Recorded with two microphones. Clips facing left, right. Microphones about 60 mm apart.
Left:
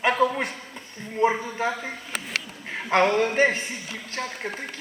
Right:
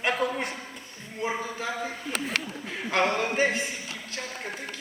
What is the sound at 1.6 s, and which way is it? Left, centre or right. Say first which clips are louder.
Speech: left 10 dB; left.